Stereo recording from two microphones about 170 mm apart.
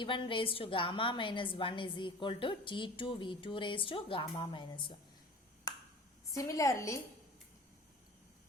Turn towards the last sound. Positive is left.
turn(degrees=20)  # may be behind; listen again after turning